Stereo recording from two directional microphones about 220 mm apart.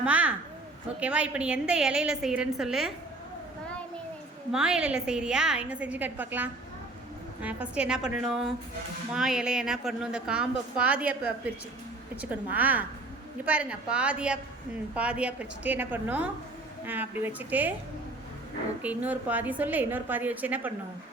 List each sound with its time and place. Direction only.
0.0 s a sound: 5° right (ahead or behind)
0.9 s a woman's voice: 5° right (ahead or behind)
4.5 s a woman's voice: 5° right (ahead or behind)
18.8 s a woman's voice: 5° right (ahead or behind)